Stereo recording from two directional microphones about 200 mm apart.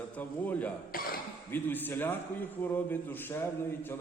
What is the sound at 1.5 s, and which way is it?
A man's voice, 10° left (ahead or behind).